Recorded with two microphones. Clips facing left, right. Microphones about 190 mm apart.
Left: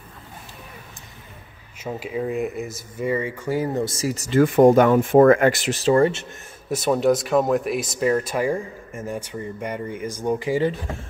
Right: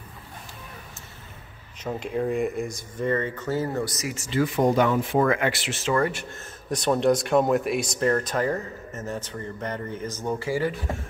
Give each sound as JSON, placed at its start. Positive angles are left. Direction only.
{"t": 1.8, "sound": "speech", "side_deg": 5}
{"t": 6.7, "sound": "speech", "side_deg": 5}